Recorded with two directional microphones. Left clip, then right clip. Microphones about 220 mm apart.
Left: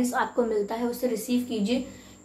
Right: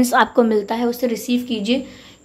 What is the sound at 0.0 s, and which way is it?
A woman's voice, 40° right (ahead or behind).